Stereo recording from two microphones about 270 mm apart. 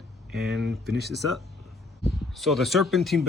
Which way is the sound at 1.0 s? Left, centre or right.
Centre.